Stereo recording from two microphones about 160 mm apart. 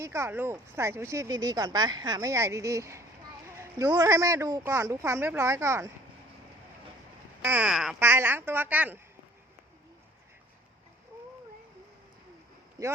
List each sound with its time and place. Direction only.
0.0 s speech: 15° right (ahead or behind)
3.5 s a sound: 15° right (ahead or behind)
3.8 s speech: 20° right (ahead or behind)
7.4 s speech: 10° right (ahead or behind)
7.9 s speech: 15° right (ahead or behind)
12.8 s speech: 20° right (ahead or behind)